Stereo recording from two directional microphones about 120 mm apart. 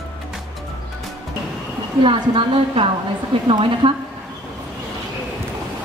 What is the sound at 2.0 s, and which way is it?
A woman's voice, 45° right (ahead or behind).